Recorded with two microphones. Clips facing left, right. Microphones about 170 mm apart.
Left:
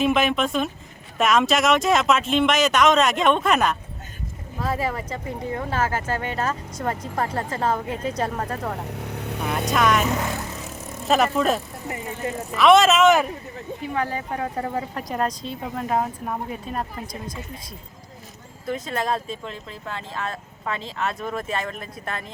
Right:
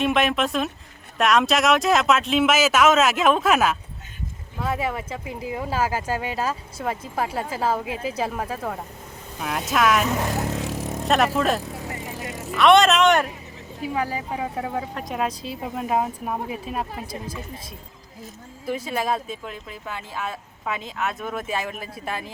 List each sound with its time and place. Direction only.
0.0 s speech: centre (ahead or behind)
8.8 s vehicle: 75° left (ahead or behind)
9.5 s speech: centre (ahead or behind)
10.5 s vehicle: 75° right (ahead or behind)
11.1 s speech: centre (ahead or behind)
13.8 s speech: 10° right (ahead or behind)
18.6 s speech: 5° right (ahead or behind)